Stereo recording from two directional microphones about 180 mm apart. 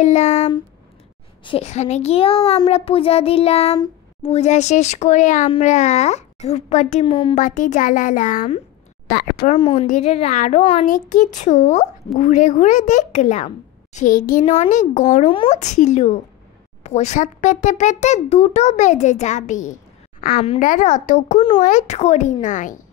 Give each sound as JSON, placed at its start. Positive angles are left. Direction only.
{"t": 0.0, "sound": "a child's voice", "side_deg": 40}
{"t": 3.7, "sound": "a sound", "side_deg": 20}
{"t": 4.3, "sound": "a child's voice", "side_deg": 35}
{"t": 7.1, "sound": "speech", "side_deg": 30}
{"t": 7.3, "sound": "a child's voice", "side_deg": 45}
{"t": 9.4, "sound": "a child's voice", "side_deg": 35}
{"t": 10.6, "sound": "speech", "side_deg": 30}
{"t": 10.9, "sound": "a child's voice", "side_deg": 45}
{"t": 14.4, "sound": "a child's voice", "side_deg": 35}